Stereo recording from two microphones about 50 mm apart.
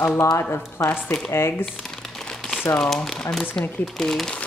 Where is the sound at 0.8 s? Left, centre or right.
Left.